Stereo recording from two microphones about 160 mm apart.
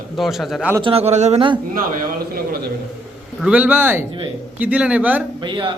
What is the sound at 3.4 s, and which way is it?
Speech, 10° right (ahead or behind).